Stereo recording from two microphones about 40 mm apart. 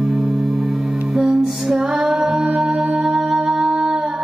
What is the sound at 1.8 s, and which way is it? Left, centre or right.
Female singing, centre.